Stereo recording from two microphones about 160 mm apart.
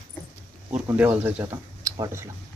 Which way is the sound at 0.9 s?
10° right (ahead or behind).